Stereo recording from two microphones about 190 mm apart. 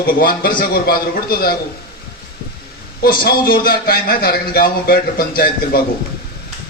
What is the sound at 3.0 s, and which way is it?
A man's voice, 55° left (ahead or behind).